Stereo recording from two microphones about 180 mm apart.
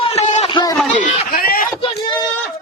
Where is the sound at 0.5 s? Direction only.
20° left (ahead or behind).